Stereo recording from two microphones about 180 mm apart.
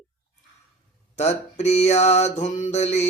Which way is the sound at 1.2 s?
40° left (ahead or behind).